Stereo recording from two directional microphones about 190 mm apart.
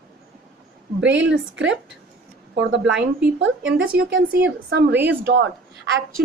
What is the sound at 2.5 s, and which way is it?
Speech, 70° right (ahead or behind).